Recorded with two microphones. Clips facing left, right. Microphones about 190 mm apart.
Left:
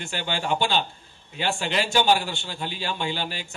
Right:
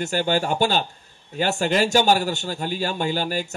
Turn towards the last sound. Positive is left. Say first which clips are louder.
# right 6 dB
turn(degrees=-45)  # may be behind; listen again after turning